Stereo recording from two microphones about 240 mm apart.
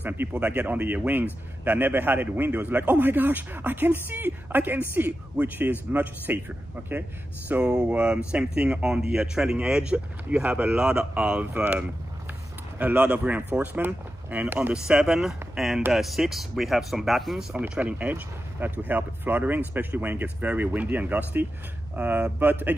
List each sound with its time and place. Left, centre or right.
0.0 s speech: centre